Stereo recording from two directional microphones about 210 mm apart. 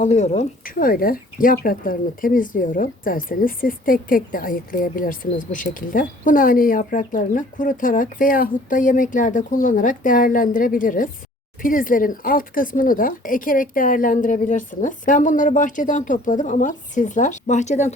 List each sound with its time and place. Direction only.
0.0 s speech: 35° left (ahead or behind)